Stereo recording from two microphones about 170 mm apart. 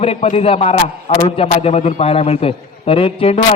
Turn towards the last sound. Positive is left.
turn(degrees=35)  # may be behind; listen again after turning